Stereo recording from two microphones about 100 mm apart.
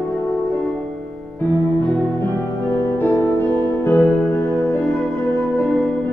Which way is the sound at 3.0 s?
20° left (ahead or behind).